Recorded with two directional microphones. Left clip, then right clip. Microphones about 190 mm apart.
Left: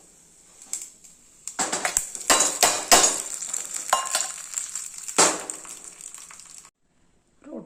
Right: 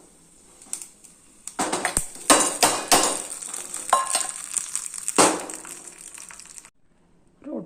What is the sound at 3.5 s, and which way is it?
Frying, 5° left (ahead or behind).